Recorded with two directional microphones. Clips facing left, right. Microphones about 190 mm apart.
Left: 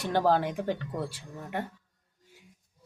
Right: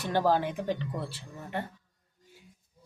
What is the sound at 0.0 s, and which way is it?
Speech, 10° left (ahead or behind).